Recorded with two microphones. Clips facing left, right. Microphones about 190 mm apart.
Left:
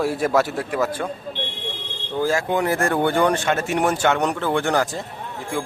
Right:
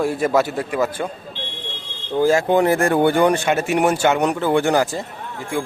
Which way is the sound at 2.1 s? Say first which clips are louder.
Right 5 dB; 15° right (ahead or behind).